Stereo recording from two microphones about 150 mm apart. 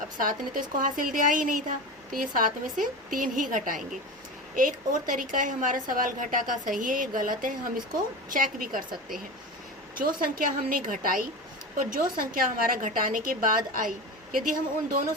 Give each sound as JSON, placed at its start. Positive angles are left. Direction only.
{"t": 0.2, "sound": "a woman's voice", "side_deg": -65}
{"t": 9.9, "sound": "a woman's voice", "side_deg": -70}